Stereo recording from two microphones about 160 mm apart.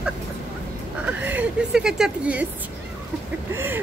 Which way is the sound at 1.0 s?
10° right (ahead or behind).